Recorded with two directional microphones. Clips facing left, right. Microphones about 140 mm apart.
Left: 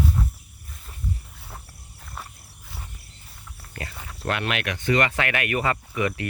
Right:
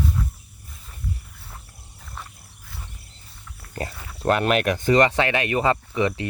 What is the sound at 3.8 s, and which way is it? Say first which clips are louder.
Speech: right 6 dB; 35° right (ahead or behind).